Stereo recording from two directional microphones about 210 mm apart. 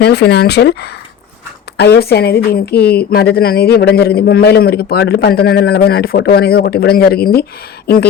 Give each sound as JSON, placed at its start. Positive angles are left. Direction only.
{"t": 0.0, "sound": "a woman's voice", "side_deg": 50}